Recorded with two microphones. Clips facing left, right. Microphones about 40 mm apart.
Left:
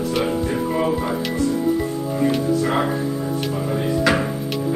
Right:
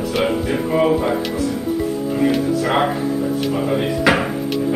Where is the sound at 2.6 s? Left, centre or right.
Right.